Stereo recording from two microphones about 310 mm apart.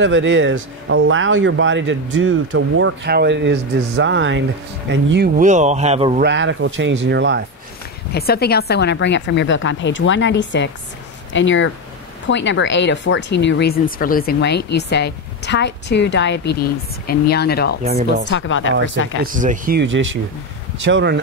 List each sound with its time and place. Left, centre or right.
0.0 s speech: right; by 6.2 s centre
6.2 s speech: right
8.1 s speech: left
19.2 s speech: right